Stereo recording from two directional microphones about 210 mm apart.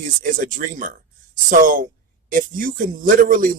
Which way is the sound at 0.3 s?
40° right (ahead or behind).